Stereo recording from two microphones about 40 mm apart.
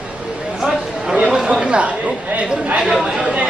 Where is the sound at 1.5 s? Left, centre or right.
Right.